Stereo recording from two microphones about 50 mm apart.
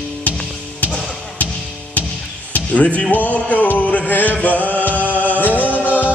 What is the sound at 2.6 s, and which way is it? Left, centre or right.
Music, left.